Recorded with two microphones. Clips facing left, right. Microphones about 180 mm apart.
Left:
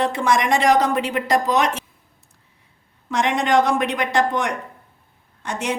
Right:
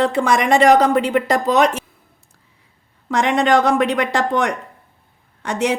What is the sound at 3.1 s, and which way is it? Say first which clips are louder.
A woman's voice: right 4 dB; 65° right (ahead or behind).